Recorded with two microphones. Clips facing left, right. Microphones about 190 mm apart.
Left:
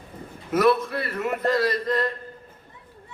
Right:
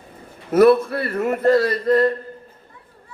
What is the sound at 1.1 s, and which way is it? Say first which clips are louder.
Speech: right 6 dB; 50° right (ahead or behind).